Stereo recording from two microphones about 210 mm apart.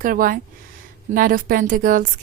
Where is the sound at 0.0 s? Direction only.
40° right (ahead or behind).